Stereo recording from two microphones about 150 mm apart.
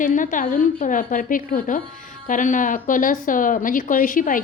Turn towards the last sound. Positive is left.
turn(degrees=65)  # may be behind; listen again after turning